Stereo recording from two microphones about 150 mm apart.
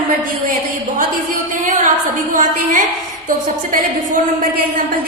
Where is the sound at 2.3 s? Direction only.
60° right (ahead or behind).